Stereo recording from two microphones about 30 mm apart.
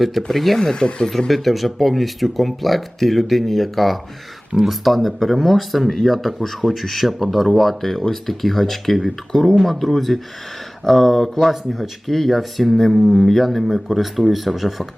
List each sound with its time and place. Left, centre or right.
0.2 s speech: centre
0.6 s speech: left
1.3 s speech: centre
9.3 s speech: centre
12.7 s speech: centre